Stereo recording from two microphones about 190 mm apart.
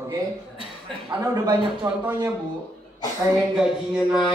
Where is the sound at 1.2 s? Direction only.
20° right (ahead or behind).